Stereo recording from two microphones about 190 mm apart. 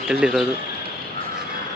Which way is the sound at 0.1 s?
5° right (ahead or behind).